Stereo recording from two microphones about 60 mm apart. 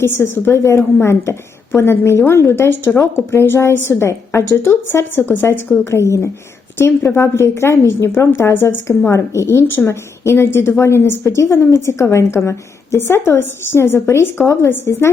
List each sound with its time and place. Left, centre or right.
0.0 s a woman's voice: left